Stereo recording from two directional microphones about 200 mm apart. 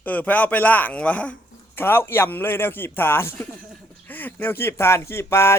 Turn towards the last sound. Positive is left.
turn(degrees=15)  # may be behind; listen again after turning